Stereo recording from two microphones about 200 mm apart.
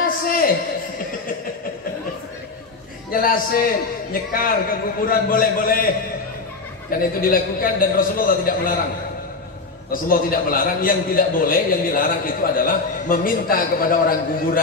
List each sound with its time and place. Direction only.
0.0 s a sound: 45° left (ahead or behind)
3.1 s a man's voice: 45° left (ahead or behind)
6.9 s a man's voice: 45° left (ahead or behind)
10.0 s a man's voice: 45° left (ahead or behind)